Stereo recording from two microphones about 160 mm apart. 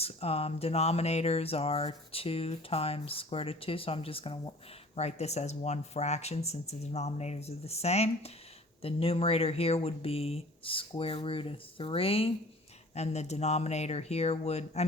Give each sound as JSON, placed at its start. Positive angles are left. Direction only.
{"t": 0.0, "sound": "speech", "side_deg": 40}